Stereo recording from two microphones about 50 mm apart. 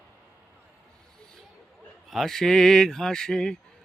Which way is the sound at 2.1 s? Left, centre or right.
Centre.